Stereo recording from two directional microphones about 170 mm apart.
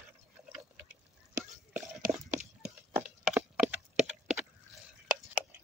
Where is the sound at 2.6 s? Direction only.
5° right (ahead or behind).